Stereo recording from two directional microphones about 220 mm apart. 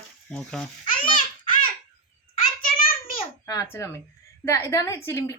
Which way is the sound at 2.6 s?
40° left (ahead or behind).